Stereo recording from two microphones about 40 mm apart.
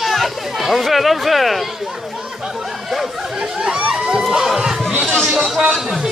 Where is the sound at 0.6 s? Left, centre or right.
Centre.